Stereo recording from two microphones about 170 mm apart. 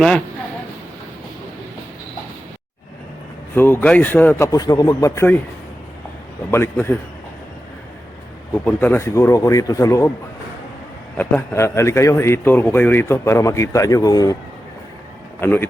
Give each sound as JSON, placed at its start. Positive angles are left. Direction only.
{"t": 3.5, "sound": "a man's voice", "side_deg": 10}
{"t": 6.5, "sound": "a man's voice", "side_deg": 15}
{"t": 8.5, "sound": "a man's voice", "side_deg": 10}
{"t": 11.2, "sound": "a man's voice", "side_deg": 10}
{"t": 15.4, "sound": "a man's voice", "side_deg": 10}